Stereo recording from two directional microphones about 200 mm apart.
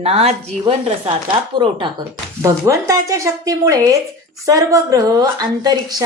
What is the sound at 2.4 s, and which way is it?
A woman's voice, 15° right (ahead or behind).